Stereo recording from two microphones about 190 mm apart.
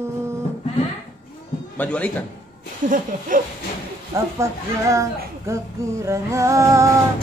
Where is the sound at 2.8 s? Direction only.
45° right (ahead or behind).